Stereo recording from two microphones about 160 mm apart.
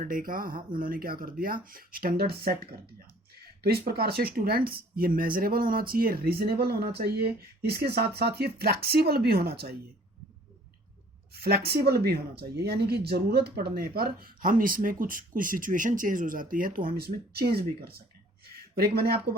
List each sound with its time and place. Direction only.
0.0 s speech: 60° right (ahead or behind); by 9.7 s 85° right
11.3 s speech: 80° right
12.4 s speech: 90° right; by 19.4 s 70° right (ahead or behind)